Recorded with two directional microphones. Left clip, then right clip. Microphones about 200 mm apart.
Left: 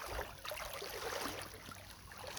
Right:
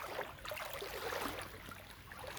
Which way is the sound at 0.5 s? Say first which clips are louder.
Right 2 dB; 10° right (ahead or behind).